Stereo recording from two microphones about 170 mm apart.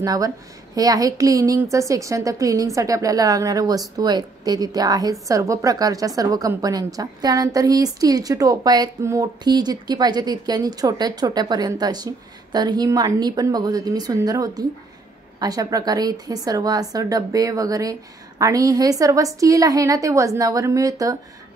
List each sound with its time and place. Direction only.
0.0 s a woman's voice: 20° right (ahead or behind)